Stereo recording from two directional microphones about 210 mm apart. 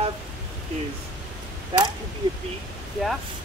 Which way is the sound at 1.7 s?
25° right (ahead or behind).